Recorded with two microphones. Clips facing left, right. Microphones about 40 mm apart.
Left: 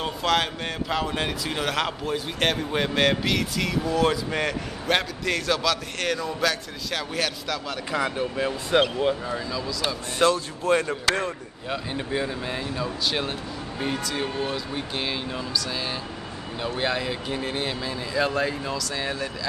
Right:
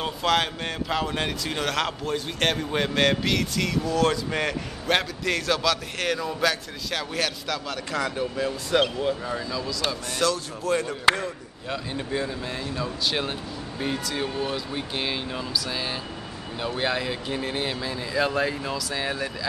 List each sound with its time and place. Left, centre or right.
0.0 s speech: centre
7.9 s speech: centre
9.2 s speech: centre
10.1 s speech: left
11.7 s speech: centre
12.7 s speech: centre